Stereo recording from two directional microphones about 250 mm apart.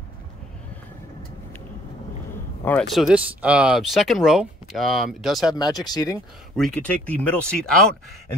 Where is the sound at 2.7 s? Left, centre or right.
Centre.